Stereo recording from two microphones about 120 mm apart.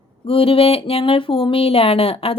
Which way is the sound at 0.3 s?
50° left (ahead or behind).